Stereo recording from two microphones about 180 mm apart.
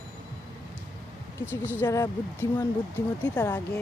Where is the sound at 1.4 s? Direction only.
10° left (ahead or behind).